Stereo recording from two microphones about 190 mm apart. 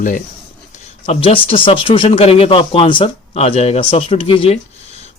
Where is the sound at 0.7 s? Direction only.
30° left (ahead or behind).